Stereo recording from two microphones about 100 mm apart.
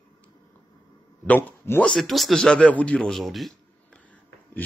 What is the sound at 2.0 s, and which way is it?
Speech, centre (ahead or behind).